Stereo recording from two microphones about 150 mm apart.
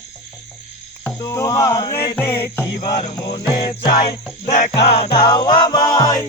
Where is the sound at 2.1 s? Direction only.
15° left (ahead or behind).